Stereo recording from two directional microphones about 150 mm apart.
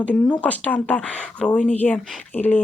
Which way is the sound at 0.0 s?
10° left (ahead or behind).